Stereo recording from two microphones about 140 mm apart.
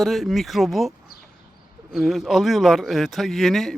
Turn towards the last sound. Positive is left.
turn(degrees=0)  # may be behind; listen again after turning